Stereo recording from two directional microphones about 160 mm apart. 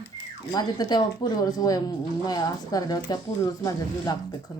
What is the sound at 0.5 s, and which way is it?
Speech, 25° left (ahead or behind).